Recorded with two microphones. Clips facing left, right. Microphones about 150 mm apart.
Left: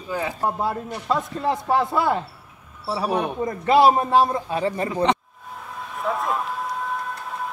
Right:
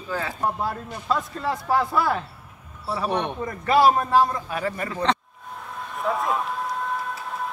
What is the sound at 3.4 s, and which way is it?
A man's voice, 20° left (ahead or behind).